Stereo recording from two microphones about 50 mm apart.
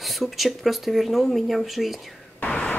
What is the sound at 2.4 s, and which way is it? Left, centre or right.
Vehicle, left.